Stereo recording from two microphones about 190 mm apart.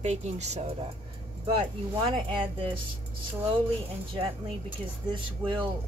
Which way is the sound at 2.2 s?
25° right (ahead or behind).